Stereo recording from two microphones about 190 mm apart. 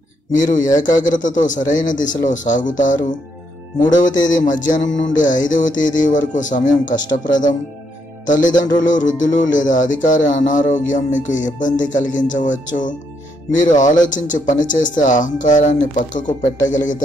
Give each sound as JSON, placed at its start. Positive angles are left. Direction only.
{"t": 0.3, "sound": "speech", "side_deg": 40}
{"t": 4.3, "sound": "speech", "side_deg": 40}